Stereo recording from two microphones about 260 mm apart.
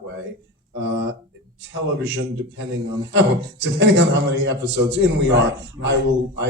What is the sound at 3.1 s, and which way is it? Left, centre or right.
A man's voice, right.